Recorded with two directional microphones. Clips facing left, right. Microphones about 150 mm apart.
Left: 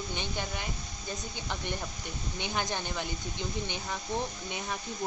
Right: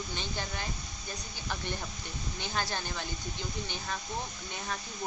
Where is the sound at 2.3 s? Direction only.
15° left (ahead or behind).